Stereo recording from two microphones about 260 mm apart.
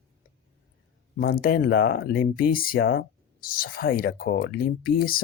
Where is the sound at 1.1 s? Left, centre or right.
Left.